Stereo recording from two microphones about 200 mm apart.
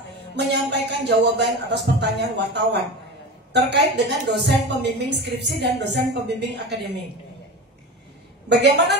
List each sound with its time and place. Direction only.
0.5 s a woman's voice: 55° right (ahead or behind)
8.5 s a woman's voice: 55° right (ahead or behind)